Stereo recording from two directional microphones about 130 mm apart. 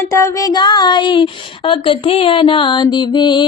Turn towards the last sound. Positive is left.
turn(degrees=35)  # may be behind; listen again after turning